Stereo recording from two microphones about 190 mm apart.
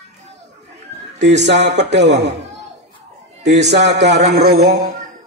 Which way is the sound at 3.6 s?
65° right (ahead or behind).